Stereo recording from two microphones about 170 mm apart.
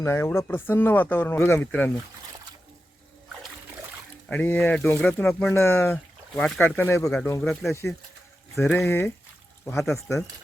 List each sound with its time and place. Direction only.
0.0 s speech: 15° left (ahead or behind)
4.3 s speech: 10° left (ahead or behind)
7.7 s speech: 15° left (ahead or behind)